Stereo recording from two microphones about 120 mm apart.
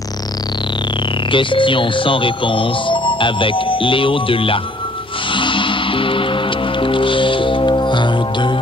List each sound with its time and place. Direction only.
1.3 s speech: 45° left (ahead or behind)
5.3 s music: 45° left (ahead or behind)